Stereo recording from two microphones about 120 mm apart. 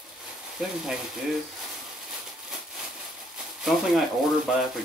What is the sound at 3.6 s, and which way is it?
Speech, centre (ahead or behind).